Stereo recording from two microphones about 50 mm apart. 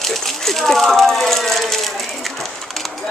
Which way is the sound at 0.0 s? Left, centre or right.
Centre.